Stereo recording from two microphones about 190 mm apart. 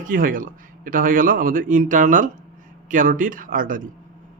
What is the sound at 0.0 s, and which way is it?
Speech, 45° right (ahead or behind).